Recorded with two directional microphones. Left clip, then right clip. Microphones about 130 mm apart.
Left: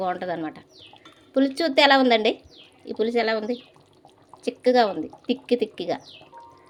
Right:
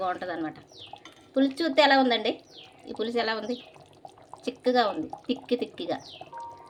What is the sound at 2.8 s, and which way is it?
Speech, 40° left (ahead or behind).